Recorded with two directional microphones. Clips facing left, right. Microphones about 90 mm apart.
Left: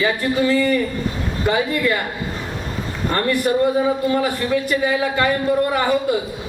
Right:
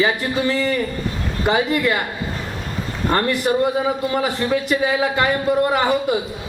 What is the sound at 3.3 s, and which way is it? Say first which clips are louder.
A woman's voice: left 1 dB; 20° right (ahead or behind).